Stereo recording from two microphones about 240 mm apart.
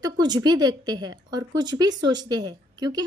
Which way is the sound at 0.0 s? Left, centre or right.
Centre.